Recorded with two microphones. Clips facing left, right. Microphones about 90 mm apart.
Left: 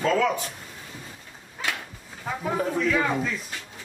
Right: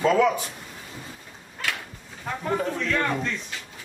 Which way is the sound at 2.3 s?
5° left (ahead or behind).